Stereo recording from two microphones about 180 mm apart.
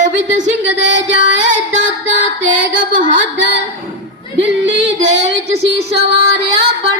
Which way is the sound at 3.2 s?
90° right.